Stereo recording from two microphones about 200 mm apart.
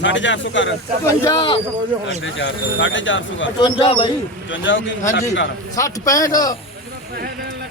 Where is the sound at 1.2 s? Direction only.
25° left (ahead or behind).